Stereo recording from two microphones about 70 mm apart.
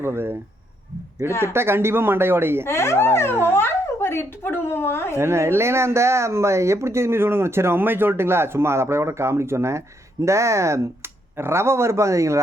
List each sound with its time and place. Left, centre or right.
0.0 s speech: right
1.3 s a woman's voice: left
1.5 s speech: right
2.6 s a woman's voice: left
5.1 s speech: right